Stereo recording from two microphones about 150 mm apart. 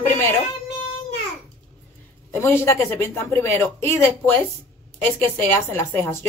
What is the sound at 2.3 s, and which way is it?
Speech, 15° left (ahead or behind).